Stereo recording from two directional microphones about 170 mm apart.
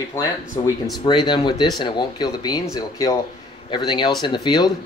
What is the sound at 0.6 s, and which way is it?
Speech, 25° left (ahead or behind).